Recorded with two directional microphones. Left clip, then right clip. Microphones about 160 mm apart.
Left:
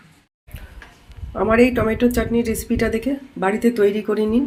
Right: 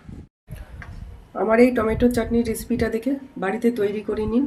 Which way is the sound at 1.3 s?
30° left (ahead or behind).